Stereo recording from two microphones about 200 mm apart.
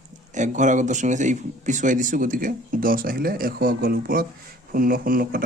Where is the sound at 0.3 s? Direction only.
40° right (ahead or behind).